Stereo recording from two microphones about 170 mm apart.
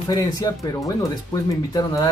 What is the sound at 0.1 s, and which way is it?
Speech, 20° left (ahead or behind).